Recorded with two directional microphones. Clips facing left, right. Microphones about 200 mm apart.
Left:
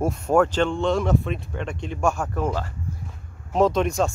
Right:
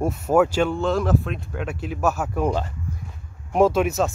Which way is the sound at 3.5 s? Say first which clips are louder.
Right 2 dB; 5° right (ahead or behind).